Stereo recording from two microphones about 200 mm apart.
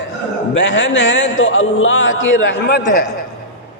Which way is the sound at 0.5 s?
65° left (ahead or behind).